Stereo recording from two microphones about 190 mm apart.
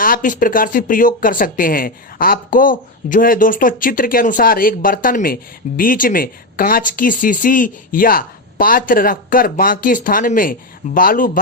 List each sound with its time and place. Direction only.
0.0 s speech: 45° left (ahead or behind)